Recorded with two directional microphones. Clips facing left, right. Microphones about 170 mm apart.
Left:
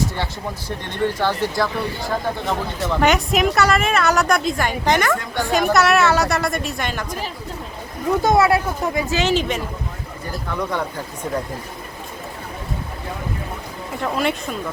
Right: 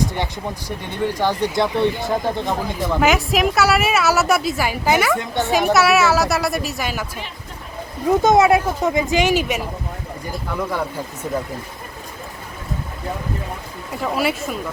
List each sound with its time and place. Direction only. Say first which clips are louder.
0.9 s speech: even; 10° right (ahead or behind)
3.1 s a woman's voice: even; centre (ahead or behind)
5.1 s speech: right 2 dB; 20° right (ahead or behind)
5.5 s a woman's voice: even; 5° right (ahead or behind)
8.2 s a woman's voice: right 2 dB; 20° right (ahead or behind)
14.0 s a woman's voice: right 1 dB; 5° right (ahead or behind)